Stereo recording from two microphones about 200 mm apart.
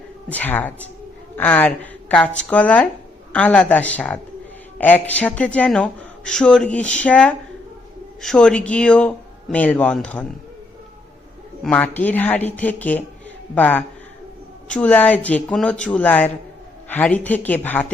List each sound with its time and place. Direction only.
0.3 s a man's voice: 10° left (ahead or behind)
11.6 s a man's voice: 5° left (ahead or behind)